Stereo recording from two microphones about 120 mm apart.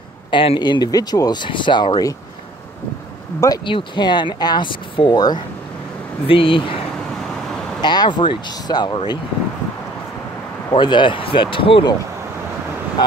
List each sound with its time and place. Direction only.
0.3 s speech: 45° left (ahead or behind)
3.6 s speech: 40° left (ahead or behind)
6.2 s speech: 45° left (ahead or behind)
7.8 s speech: 35° left (ahead or behind)
10.7 s speech: 40° left (ahead or behind)